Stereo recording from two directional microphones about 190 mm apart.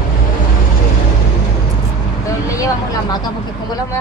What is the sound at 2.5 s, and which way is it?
Speech, 20° left (ahead or behind).